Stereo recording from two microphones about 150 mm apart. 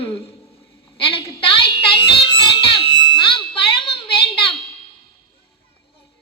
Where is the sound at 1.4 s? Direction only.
35° left (ahead or behind).